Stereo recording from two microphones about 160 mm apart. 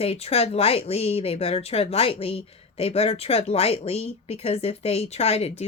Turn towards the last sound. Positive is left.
turn(degrees=40)  # may be behind; listen again after turning